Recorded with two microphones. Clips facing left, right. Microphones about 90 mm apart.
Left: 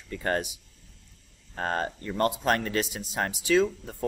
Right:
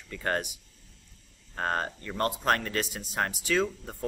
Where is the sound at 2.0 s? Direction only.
20° left (ahead or behind).